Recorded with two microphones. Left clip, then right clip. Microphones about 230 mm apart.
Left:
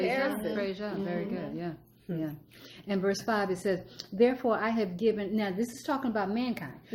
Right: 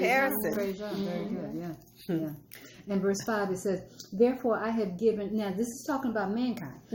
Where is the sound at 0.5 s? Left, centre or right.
Left.